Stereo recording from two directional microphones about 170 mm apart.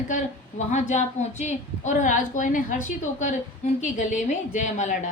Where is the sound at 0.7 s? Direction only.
45° left (ahead or behind).